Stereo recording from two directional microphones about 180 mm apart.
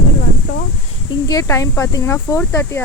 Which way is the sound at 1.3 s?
20° left (ahead or behind).